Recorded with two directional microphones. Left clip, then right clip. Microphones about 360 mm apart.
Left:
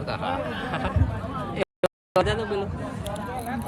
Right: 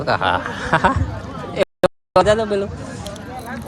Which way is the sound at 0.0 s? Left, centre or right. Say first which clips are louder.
Right 10 dB; centre.